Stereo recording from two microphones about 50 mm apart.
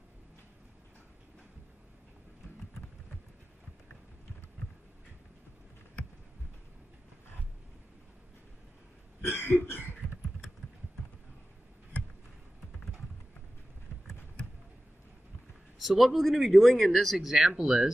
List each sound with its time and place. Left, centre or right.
9.2 s cough: left
9.7 s a sound: left
15.8 s speech: centre